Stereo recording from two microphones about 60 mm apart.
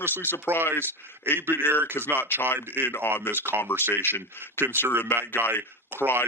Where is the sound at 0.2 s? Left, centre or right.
Left.